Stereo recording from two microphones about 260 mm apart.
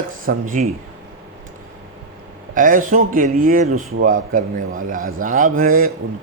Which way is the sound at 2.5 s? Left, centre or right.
Right.